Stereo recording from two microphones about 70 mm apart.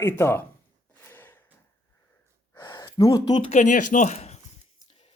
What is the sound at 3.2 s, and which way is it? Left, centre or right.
Speech, left.